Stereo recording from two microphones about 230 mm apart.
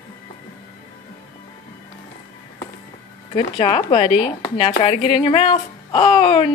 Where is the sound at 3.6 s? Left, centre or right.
Left.